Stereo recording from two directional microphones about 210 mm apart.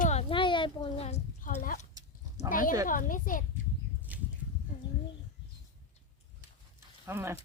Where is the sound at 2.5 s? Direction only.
40° left (ahead or behind).